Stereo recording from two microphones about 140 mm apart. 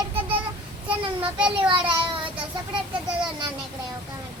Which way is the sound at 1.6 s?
35° right (ahead or behind).